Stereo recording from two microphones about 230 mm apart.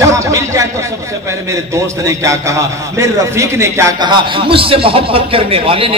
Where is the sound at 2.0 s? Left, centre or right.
Centre.